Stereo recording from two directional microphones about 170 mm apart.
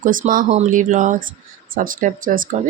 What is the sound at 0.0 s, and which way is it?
Speech, 50° right (ahead or behind).